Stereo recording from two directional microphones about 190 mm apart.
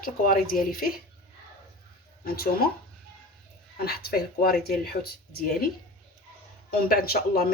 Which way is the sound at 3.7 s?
55° left (ahead or behind).